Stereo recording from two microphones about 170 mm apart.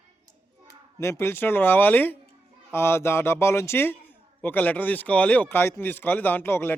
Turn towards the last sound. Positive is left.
turn(degrees=15)  # may be behind; listen again after turning